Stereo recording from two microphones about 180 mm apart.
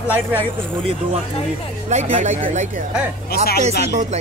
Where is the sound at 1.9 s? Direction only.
40° right (ahead or behind).